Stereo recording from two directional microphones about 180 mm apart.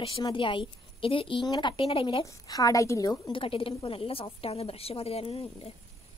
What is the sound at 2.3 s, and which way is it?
A woman's voice, 20° left (ahead or behind).